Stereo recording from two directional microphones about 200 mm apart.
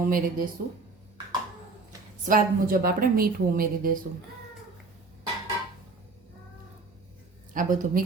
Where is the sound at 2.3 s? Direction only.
45° right (ahead or behind).